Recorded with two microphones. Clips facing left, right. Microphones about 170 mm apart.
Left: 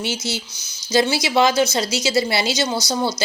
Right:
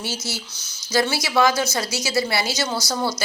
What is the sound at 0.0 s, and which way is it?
A woman's voice, 20° left (ahead or behind).